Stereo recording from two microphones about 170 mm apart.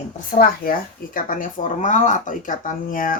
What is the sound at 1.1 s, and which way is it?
Speech, 50° left (ahead or behind).